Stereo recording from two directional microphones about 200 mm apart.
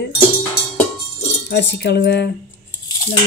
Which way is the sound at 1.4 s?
55° left (ahead or behind).